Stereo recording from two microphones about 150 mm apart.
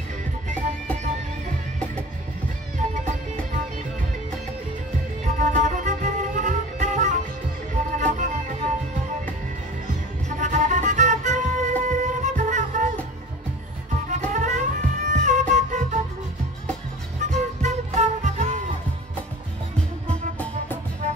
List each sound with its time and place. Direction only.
0.5 s music: 55° right (ahead or behind)
2.8 s music: 55° right (ahead or behind)
5.2 s music: 55° right (ahead or behind)
10.4 s music: 55° right (ahead or behind)
14.1 s music: 55° right (ahead or behind)
17.3 s music: 50° right (ahead or behind)